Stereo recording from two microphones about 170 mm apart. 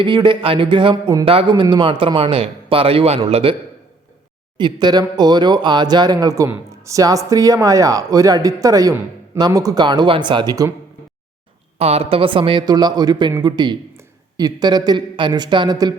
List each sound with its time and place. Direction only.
0.0 s a man's voice: 30° right (ahead or behind)
4.5 s speech: 25° right (ahead or behind)
11.8 s a man's voice: 35° right (ahead or behind)